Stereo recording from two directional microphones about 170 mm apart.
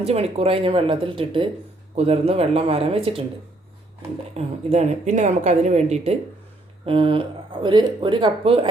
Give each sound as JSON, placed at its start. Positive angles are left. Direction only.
{"t": 0.0, "sound": "speech", "side_deg": -40}
{"t": 4.4, "sound": "speech", "side_deg": -40}